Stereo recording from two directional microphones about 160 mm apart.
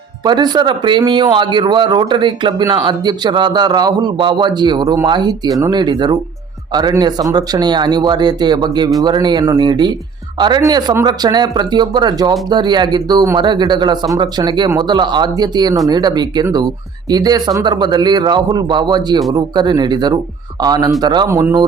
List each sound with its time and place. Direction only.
0.3 s speech: 25° right (ahead or behind)